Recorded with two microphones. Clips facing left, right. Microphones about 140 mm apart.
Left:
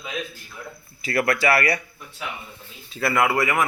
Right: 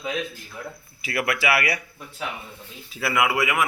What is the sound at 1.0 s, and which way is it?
Speech, 5° right (ahead or behind).